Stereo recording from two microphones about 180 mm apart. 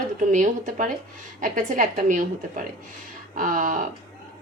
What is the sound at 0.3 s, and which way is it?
Speech, 45° right (ahead or behind).